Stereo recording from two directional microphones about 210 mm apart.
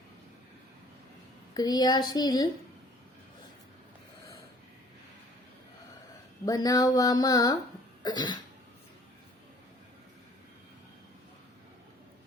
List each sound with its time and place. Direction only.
1.5 s a woman's voice: 20° left (ahead or behind)
6.4 s a sound: 15° left (ahead or behind)
8.0 s a woman's voice: 20° left (ahead or behind)